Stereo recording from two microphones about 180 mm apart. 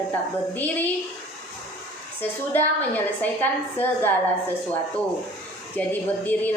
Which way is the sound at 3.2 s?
10° left (ahead or behind).